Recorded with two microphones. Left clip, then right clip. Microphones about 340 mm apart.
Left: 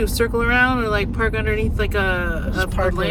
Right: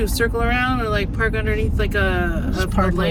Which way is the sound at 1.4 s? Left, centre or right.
Left.